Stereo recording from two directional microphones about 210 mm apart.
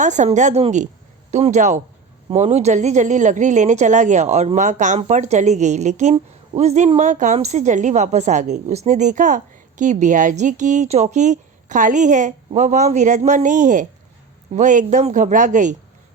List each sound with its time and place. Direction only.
0.0 s speech: 35° right (ahead or behind)